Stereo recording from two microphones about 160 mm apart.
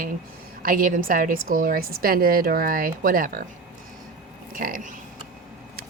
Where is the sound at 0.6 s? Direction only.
60° right (ahead or behind).